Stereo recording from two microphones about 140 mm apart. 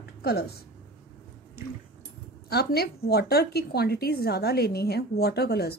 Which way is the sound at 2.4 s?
90° left.